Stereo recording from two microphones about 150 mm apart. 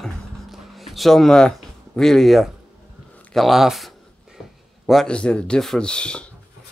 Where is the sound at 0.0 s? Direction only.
Centre (ahead or behind).